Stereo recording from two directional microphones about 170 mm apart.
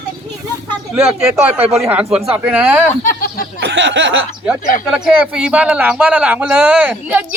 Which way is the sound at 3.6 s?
90° right.